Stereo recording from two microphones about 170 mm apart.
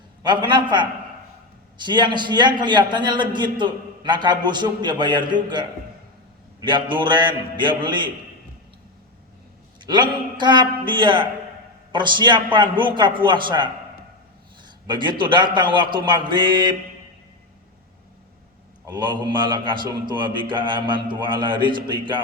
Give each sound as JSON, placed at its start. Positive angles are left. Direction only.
{"t": 0.2, "sound": "a man's voice", "side_deg": -25}
{"t": 9.8, "sound": "a man's voice", "side_deg": -25}
{"t": 14.8, "sound": "a man's voice", "side_deg": -25}
{"t": 18.9, "sound": "a man's voice", "side_deg": -25}